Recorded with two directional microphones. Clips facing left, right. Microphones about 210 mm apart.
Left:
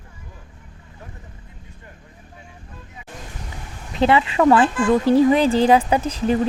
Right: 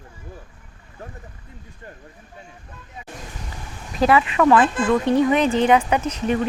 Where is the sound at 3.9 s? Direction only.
25° left (ahead or behind).